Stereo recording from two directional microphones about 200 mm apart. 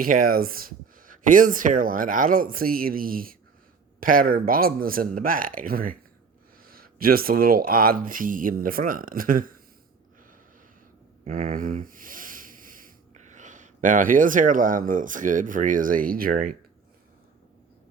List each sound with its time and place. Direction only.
0.0 s speech: 45° right (ahead or behind)
11.3 s speech: 40° right (ahead or behind)